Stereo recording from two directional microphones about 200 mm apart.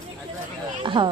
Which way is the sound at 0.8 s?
25° right (ahead or behind).